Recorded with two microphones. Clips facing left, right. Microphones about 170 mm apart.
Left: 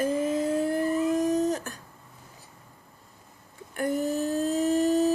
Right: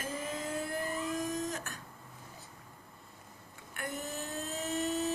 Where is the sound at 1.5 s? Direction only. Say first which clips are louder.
Left 11 dB; 35° left (ahead or behind).